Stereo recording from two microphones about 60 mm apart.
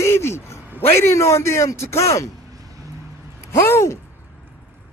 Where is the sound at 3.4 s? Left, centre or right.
Left.